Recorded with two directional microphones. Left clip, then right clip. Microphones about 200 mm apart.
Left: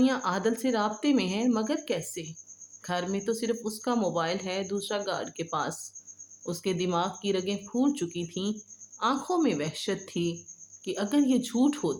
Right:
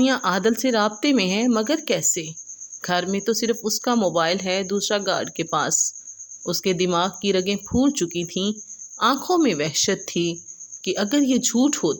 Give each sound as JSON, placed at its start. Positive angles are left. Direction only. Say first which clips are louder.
{"t": 0.0, "sound": "speech", "louder": "right 7 dB", "side_deg": -40}